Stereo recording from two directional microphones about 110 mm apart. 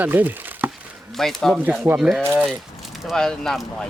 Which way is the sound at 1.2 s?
Centre (ahead or behind).